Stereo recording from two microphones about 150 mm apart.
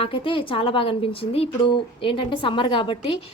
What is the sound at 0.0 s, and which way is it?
A woman's voice, 35° left (ahead or behind).